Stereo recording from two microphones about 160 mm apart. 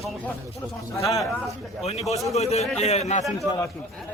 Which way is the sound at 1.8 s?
40° left (ahead or behind).